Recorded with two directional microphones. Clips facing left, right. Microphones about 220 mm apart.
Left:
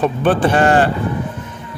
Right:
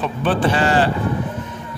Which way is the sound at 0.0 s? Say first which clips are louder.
Left 4 dB; 50° left (ahead or behind).